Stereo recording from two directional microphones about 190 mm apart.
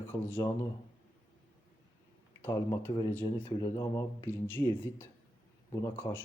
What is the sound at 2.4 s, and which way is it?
Speech, 15° left (ahead or behind).